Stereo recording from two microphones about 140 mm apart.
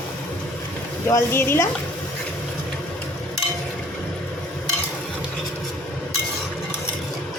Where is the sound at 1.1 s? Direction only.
20° left (ahead or behind).